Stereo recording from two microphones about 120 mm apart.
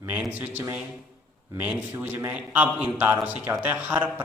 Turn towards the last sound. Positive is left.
turn(degrees=-15)  # may be behind; listen again after turning